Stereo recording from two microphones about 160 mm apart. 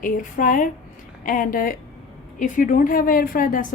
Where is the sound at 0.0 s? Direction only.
55° left (ahead or behind).